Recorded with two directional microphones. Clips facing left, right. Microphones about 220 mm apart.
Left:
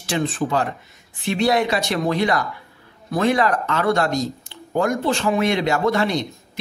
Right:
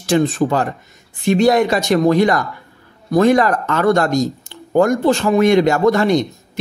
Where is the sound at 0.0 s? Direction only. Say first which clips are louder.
Right 7 dB; 45° right (ahead or behind).